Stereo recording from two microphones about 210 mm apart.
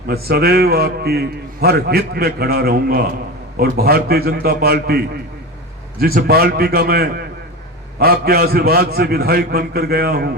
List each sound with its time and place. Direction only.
0.1 s a man's voice: 50° right (ahead or behind)